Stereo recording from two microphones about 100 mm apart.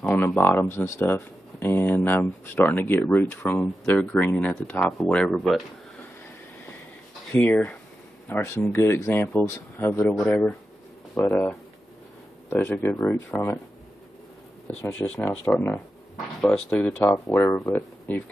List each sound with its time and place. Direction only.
0.4 s speech: 25° left (ahead or behind); by 5.6 s centre (ahead or behind)
7.3 s speech: 15° left (ahead or behind)
10.1 s speech: 10° left (ahead or behind)
14.8 s speech: 15° left (ahead or behind)
17.1 s speech: 20° left (ahead or behind)